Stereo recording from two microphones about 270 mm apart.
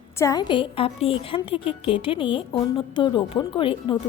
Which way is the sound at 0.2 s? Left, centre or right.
Centre.